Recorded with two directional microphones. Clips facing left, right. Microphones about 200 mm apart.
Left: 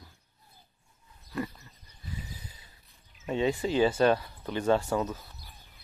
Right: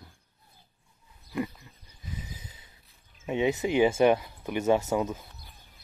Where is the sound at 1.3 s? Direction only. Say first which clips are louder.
Right 3 dB; 15° right (ahead or behind).